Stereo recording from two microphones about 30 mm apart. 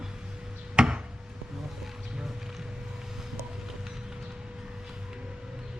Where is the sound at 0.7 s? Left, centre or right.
Right.